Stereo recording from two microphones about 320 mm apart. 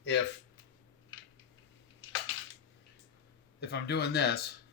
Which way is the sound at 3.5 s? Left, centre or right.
Left.